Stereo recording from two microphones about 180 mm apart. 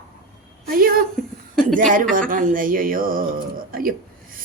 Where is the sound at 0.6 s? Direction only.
55° right (ahead or behind).